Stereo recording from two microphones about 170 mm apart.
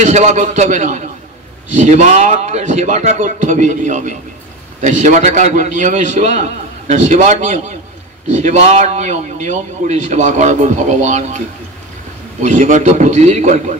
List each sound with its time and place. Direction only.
0.0 s a man's voice: 45° right (ahead or behind)